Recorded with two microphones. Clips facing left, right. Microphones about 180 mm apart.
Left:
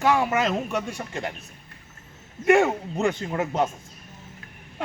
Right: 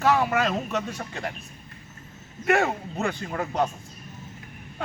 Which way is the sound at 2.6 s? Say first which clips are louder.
Left 4 dB; 20° left (ahead or behind).